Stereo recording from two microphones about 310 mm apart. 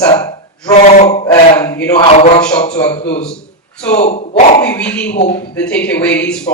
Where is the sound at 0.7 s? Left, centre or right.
Left.